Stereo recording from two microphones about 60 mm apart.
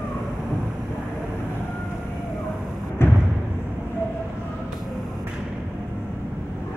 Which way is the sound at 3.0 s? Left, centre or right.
Left.